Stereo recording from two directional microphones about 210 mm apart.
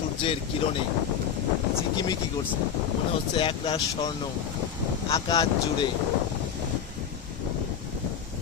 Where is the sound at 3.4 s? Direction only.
25° left (ahead or behind).